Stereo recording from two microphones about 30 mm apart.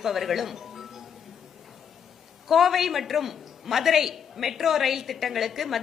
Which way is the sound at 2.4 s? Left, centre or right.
Centre.